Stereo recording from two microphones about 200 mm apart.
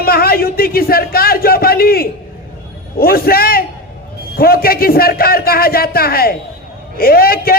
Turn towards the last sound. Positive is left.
turn(degrees=50)  # may be behind; listen again after turning